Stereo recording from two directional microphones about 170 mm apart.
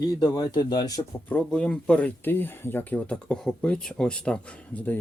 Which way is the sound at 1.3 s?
5° left (ahead or behind).